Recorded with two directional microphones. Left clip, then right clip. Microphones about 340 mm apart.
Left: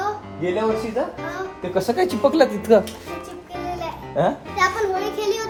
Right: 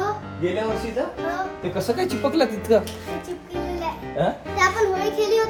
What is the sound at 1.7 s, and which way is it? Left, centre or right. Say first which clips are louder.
Speech: left 5 dB; left.